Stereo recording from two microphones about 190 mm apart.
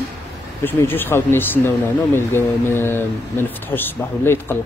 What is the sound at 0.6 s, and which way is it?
Speech, 10° left (ahead or behind).